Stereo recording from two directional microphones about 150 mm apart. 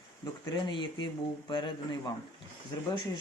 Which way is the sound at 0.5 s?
30° left (ahead or behind).